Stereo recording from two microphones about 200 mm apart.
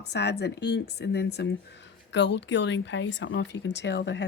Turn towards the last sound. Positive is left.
turn(degrees=60)  # may be behind; listen again after turning